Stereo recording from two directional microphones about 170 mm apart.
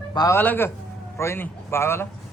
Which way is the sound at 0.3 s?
10° left (ahead or behind).